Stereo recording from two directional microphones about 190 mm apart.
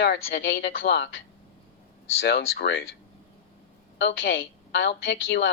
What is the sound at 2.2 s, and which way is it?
Speech, 60° left (ahead or behind).